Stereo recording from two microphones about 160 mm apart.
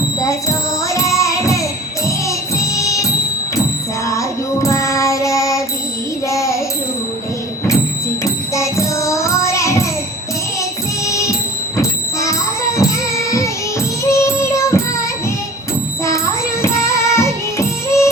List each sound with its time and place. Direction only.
0.2 s music: 20° left (ahead or behind)
6.2 s child singing: 20° left (ahead or behind)
8.2 s music: 20° left (ahead or behind)
11.0 s music: 20° left (ahead or behind)
16.0 s music: 20° left (ahead or behind)